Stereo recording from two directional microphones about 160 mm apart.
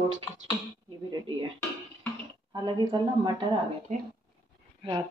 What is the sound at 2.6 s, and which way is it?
Speech, 30° right (ahead or behind).